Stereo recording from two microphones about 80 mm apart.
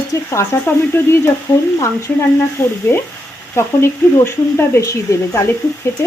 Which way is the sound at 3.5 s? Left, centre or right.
Left.